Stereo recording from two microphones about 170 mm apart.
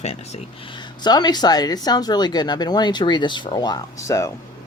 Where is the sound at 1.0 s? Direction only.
25° left (ahead or behind).